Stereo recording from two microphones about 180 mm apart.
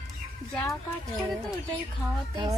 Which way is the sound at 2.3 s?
25° right (ahead or behind).